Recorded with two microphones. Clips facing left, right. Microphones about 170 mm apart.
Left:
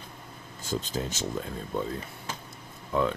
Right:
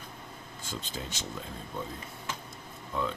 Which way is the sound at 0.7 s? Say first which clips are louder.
Left 8 dB; 40° left (ahead or behind).